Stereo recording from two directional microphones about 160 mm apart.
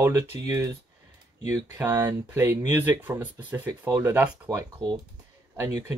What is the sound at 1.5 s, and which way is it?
Speech, 20° right (ahead or behind).